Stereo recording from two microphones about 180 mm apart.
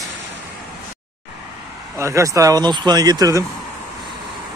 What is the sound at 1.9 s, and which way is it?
Speech, 15° right (ahead or behind).